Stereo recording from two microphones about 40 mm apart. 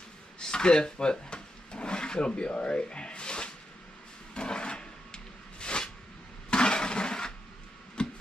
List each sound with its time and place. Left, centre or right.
0.4 s drawer open or close: left
4.3 s a sound: left
8.0 s music: left